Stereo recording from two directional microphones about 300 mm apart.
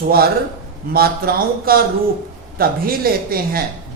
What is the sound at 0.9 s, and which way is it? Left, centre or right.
Speech, right.